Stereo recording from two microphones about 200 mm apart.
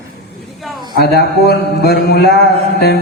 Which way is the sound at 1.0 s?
50° left (ahead or behind).